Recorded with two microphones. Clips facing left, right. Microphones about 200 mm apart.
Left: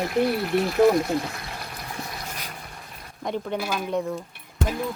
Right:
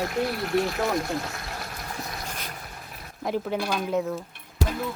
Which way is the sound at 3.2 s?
5° right (ahead or behind).